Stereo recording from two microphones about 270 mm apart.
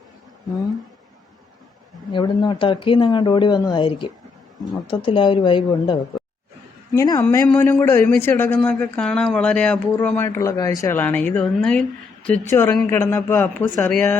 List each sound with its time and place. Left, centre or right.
2.1 s a man's voice: centre